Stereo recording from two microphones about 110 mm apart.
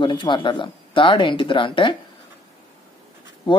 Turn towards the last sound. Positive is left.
turn(degrees=50)  # may be behind; listen again after turning